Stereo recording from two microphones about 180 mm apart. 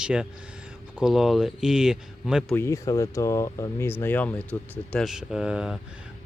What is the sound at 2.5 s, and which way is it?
Speech, 15° left (ahead or behind).